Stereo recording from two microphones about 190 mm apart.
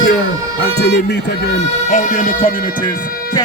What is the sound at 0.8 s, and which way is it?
Speech, 60° left (ahead or behind).